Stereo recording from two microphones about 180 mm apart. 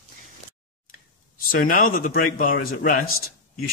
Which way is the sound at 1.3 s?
50° left (ahead or behind).